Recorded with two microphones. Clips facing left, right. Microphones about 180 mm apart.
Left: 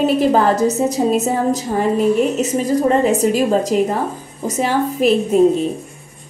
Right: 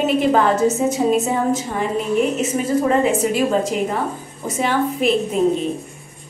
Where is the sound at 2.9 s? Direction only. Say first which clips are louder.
Left 3 dB; 40° left (ahead or behind).